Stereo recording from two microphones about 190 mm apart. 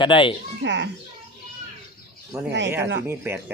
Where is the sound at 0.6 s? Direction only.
70° right (ahead or behind).